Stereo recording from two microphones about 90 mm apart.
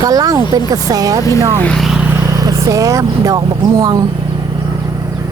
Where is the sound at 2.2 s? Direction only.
40° right (ahead or behind).